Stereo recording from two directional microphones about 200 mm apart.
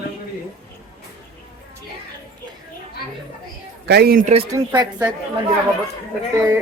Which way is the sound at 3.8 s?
50° right (ahead or behind).